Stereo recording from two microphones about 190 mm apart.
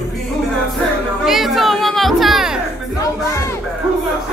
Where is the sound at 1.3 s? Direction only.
Centre (ahead or behind).